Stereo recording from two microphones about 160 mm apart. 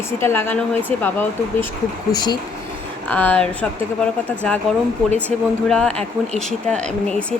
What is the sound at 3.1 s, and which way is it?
Speech, 10° left (ahead or behind).